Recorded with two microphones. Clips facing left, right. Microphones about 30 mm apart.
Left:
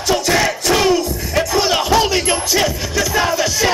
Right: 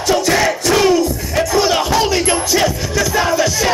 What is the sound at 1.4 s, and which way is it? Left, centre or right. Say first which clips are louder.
Music: right 2 dB; centre.